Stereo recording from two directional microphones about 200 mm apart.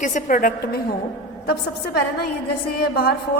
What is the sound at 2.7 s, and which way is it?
Speech, 50° left (ahead or behind).